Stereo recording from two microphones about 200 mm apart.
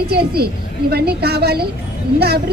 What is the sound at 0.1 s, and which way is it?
A woman's voice, 50° right (ahead or behind).